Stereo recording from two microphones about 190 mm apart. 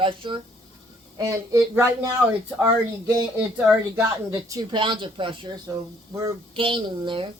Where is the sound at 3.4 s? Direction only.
5° right (ahead or behind).